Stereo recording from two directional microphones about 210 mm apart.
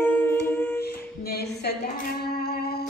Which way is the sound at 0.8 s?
50° left (ahead or behind).